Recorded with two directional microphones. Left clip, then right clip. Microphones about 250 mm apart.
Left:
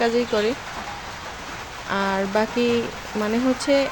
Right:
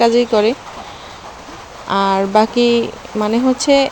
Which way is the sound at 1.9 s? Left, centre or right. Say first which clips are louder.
Right 9 dB; right.